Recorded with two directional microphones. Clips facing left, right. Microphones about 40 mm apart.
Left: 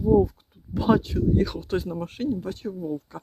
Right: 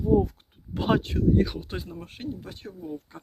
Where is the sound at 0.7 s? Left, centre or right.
Right.